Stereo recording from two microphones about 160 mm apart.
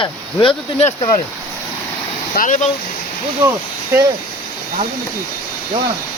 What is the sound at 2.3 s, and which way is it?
Speech, 55° left (ahead or behind).